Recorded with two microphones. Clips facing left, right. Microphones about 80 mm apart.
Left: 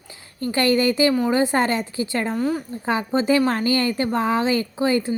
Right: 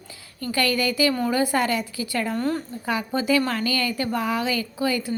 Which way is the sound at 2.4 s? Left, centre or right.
Centre.